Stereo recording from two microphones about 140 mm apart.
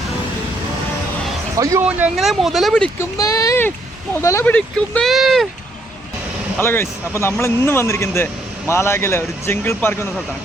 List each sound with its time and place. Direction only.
1.5 s speech: 25° right (ahead or behind)
2.1 s speech: centre (ahead or behind)
3.0 s speech: 25° left (ahead or behind)
4.5 s speech: 5° left (ahead or behind)
6.6 s speech: 15° left (ahead or behind)